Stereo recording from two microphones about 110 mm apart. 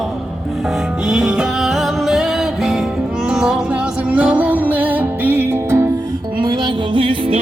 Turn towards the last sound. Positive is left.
turn(degrees=-55)  # may be behind; listen again after turning